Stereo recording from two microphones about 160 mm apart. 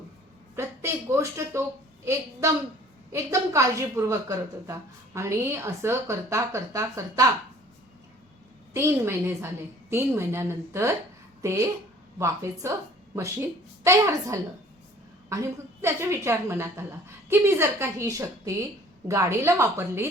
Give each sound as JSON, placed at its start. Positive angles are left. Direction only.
{"t": 0.5, "sound": "a woman's voice", "side_deg": -15}
{"t": 8.7, "sound": "a woman's voice", "side_deg": -15}
{"t": 13.8, "sound": "a woman's voice", "side_deg": -20}